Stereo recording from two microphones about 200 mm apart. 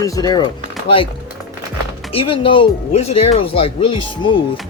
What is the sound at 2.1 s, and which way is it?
Speech, 25° left (ahead or behind).